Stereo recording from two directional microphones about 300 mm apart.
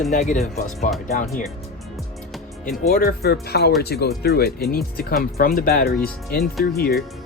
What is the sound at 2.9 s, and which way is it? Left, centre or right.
Speech, left.